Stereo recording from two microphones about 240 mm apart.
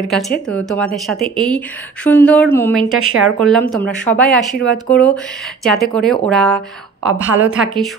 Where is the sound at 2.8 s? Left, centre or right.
Right.